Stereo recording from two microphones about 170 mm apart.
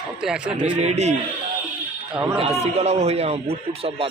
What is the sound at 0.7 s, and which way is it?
Speech, 40° right (ahead or behind).